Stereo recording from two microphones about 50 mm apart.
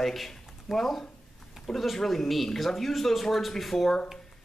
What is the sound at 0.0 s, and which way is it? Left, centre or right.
Speech, centre.